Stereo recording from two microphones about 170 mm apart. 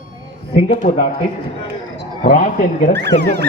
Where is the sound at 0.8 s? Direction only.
35° left (ahead or behind).